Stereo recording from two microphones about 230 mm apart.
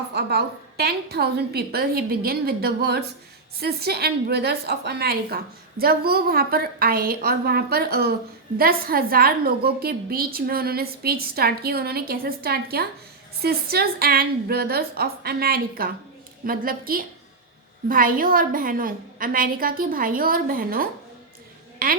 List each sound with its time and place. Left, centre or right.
0.1 s a woman's voice: right